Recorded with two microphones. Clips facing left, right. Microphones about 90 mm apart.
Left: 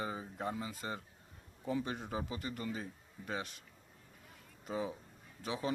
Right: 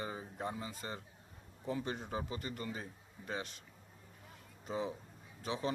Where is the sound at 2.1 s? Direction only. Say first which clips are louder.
Left 1 dB; 10° left (ahead or behind).